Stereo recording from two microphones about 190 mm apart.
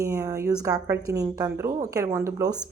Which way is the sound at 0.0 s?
15° right (ahead or behind).